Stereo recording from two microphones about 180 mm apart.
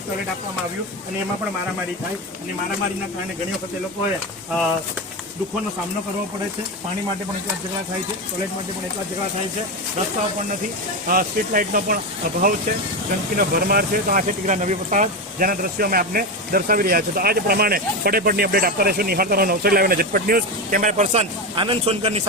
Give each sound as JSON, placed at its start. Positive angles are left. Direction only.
{"t": 11.1, "sound": "speech", "side_deg": -50}